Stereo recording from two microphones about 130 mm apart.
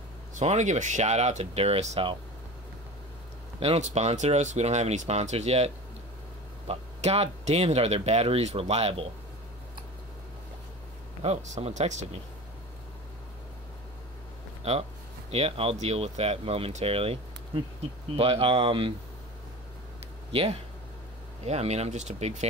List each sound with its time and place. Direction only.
0.4 s speech: 65° right (ahead or behind)
3.5 s speech: 50° right (ahead or behind)
6.7 s speech: 55° right (ahead or behind)
11.2 s speech: 60° right (ahead or behind)
14.6 s speech: 55° right (ahead or behind)
21.5 s speech: 55° right (ahead or behind)